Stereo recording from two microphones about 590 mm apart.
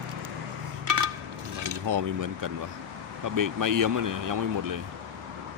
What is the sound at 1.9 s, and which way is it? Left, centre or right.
Speech, right.